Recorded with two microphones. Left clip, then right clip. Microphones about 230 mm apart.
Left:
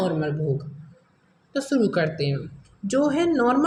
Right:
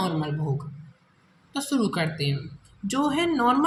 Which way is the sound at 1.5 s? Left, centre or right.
Right.